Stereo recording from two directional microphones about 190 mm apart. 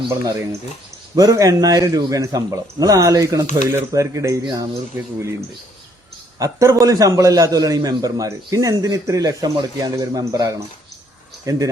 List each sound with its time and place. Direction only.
0.1 s speech: 15° right (ahead or behind)
6.4 s a man's voice: 15° right (ahead or behind)